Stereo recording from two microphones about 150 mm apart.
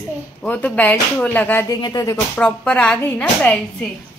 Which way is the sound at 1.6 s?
25° left (ahead or behind).